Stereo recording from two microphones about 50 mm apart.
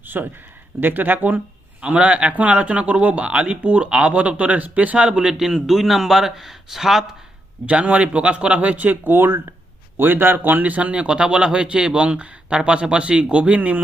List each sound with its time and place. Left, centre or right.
0.0 s a sound: right
0.8 s a man's voice: right; by 7.2 s centre
7.7 s a man's voice: right